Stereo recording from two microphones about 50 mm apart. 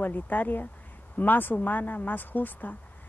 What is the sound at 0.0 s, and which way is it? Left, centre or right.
A woman's voice, left.